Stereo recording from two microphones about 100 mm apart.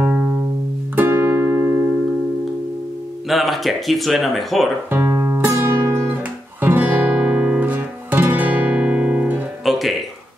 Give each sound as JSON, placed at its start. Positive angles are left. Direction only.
{"t": 0.9, "sound": "music", "side_deg": -20}
{"t": 3.3, "sound": "speech", "side_deg": 0}
{"t": 4.9, "sound": "music", "side_deg": -20}
{"t": 6.6, "sound": "guitar", "side_deg": -20}
{"t": 9.7, "sound": "music", "side_deg": 0}